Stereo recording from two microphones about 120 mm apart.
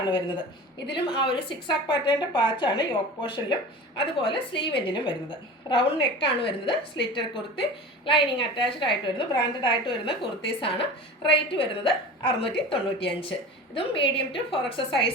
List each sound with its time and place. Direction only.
0.0 s a woman's voice: 40° left (ahead or behind)